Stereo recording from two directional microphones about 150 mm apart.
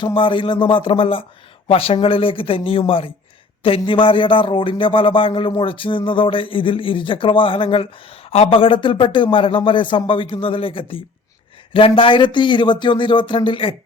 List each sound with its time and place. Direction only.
0.0 s speech: 35° left (ahead or behind)